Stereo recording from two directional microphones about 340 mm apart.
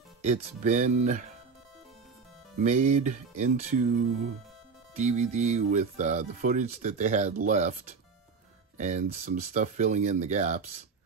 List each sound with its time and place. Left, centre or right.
0.2 s speech: right
2.6 s speech: right
8.7 s speech: right